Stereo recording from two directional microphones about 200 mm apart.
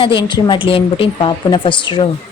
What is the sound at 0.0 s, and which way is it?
Speech, 25° left (ahead or behind).